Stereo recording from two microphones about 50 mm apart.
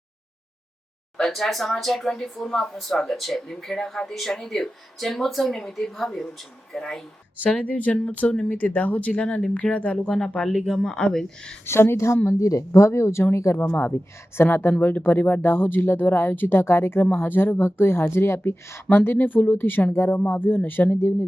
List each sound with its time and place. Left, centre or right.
1.3 s speech: centre
7.5 s speech: left
10.4 s speech: centre
11.6 s a woman's voice: left
12.2 s speech: left
13.6 s speech: left
14.7 s speech: left
19.9 s a woman's voice: left
20.2 s speech: left